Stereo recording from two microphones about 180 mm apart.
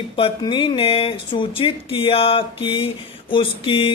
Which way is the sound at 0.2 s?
30° left (ahead or behind).